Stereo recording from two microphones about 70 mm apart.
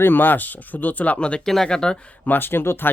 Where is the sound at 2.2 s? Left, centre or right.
Left.